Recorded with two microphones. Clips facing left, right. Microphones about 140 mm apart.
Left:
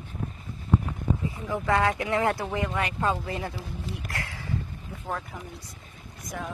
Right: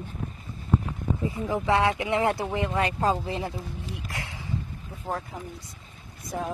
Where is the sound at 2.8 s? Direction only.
35° right (ahead or behind).